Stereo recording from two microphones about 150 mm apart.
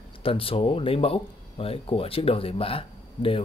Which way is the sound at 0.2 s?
40° left (ahead or behind).